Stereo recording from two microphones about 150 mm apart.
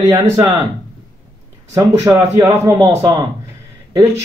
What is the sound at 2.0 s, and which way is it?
Speech, 25° right (ahead or behind).